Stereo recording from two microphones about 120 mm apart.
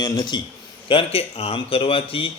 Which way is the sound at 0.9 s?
50° left (ahead or behind).